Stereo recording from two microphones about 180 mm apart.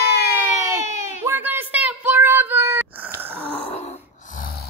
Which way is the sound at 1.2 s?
15° right (ahead or behind).